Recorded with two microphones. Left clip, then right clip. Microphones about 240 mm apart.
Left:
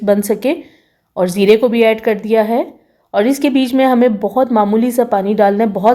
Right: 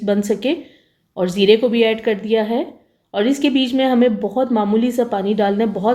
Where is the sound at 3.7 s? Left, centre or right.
Left.